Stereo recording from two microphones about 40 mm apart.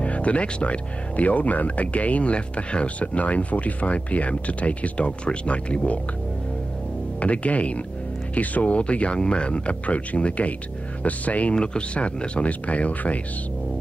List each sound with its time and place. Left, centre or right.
0.0 s speech: left
7.2 s speech: left
11.5 s speech: left